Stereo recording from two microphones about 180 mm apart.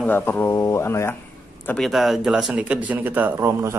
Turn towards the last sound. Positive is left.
turn(degrees=-15)  # may be behind; listen again after turning